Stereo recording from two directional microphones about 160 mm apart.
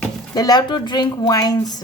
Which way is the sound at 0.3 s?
25° left (ahead or behind).